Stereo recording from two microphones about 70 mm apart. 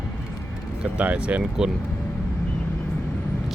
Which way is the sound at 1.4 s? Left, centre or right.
Centre.